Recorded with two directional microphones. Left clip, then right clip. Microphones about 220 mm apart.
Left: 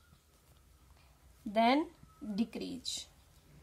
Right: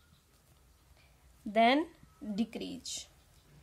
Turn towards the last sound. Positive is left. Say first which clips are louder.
# left 1 dB
turn(degrees=-25)  # may be behind; listen again after turning